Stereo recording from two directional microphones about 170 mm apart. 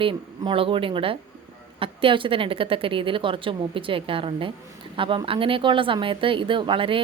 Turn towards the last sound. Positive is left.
turn(degrees=-30)  # may be behind; listen again after turning